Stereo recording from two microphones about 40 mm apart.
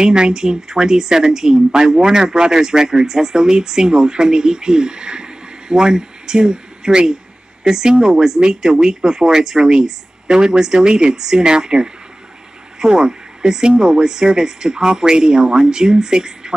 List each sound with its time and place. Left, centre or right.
0.0 s speech: centre